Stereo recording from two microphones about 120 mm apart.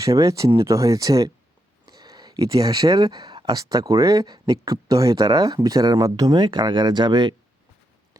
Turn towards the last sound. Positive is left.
turn(degrees=-40)  # may be behind; listen again after turning